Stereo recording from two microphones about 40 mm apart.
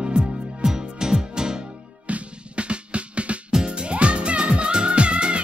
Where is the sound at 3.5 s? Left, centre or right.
Centre.